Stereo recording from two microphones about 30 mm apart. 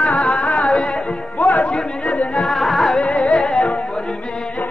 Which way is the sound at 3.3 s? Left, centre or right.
Centre.